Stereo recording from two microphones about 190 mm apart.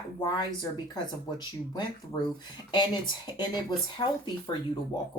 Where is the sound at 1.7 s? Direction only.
25° left (ahead or behind).